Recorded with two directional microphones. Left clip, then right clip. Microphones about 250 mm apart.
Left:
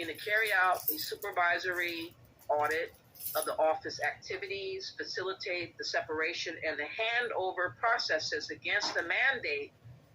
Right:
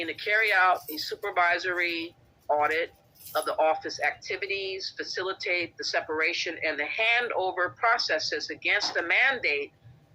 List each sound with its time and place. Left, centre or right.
0.0 s speech: right